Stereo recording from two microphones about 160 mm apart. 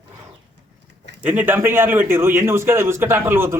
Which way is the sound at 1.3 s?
10° right (ahead or behind).